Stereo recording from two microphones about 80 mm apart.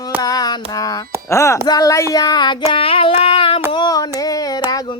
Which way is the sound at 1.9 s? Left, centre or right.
Left.